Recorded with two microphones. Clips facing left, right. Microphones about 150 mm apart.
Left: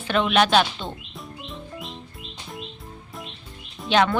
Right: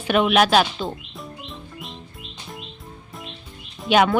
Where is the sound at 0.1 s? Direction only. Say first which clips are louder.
Right 2 dB; 10° right (ahead or behind).